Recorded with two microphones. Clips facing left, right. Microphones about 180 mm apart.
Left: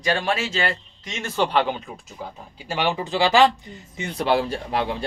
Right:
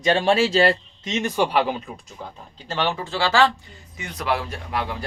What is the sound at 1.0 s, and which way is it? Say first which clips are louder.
Speech: right 2 dB; 20° right (ahead or behind).